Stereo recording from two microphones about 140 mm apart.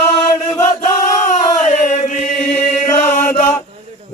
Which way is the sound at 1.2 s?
60° left (ahead or behind).